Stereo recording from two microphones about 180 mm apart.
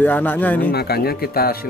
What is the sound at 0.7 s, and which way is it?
Speech, 60° left (ahead or behind).